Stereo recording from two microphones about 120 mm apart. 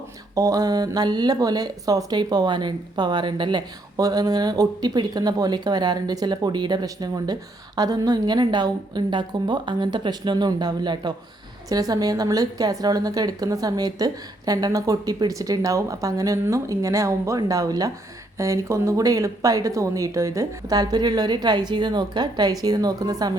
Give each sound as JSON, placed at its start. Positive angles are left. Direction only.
{"t": 0.3, "sound": "speech", "side_deg": -30}